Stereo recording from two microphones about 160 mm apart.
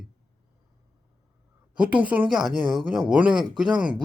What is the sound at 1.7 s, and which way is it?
Speech, 10° right (ahead or behind).